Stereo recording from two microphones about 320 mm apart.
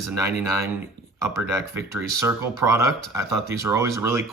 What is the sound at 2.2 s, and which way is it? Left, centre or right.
Speech, centre.